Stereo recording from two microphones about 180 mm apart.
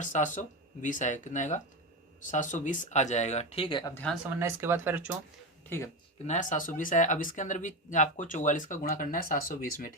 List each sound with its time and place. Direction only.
0.0 s speech: 45° left (ahead or behind); by 3.9 s 25° left (ahead or behind)
4.4 s speech: 15° right (ahead or behind)
5.6 s speech: 15° left (ahead or behind)
6.2 s speech: 40° left (ahead or behind)